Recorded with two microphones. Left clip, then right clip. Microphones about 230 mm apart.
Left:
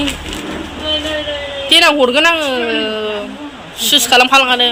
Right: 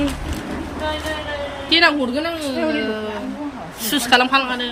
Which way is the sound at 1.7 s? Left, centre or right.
Centre.